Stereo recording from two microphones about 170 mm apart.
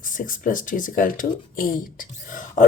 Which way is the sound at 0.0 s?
50° left (ahead or behind).